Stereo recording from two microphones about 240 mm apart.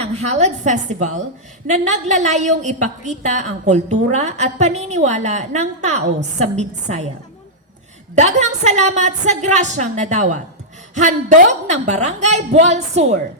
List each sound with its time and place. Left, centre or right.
0.0 s a woman's voice: right
8.1 s a woman's voice: right